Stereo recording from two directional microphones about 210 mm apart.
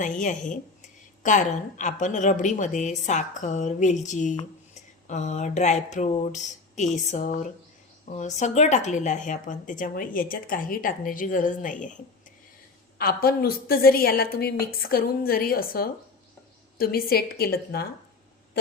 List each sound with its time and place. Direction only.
0.0 s speech: 35° left (ahead or behind)
4.7 s a sound: 35° left (ahead or behind)
8.1 s speech: 35° left (ahead or behind)
13.0 s a woman's voice: 45° left (ahead or behind)